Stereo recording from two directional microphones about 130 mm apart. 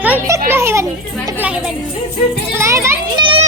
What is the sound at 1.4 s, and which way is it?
Speech, 10° right (ahead or behind).